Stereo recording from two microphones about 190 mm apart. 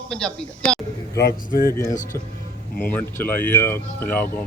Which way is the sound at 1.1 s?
50° left (ahead or behind).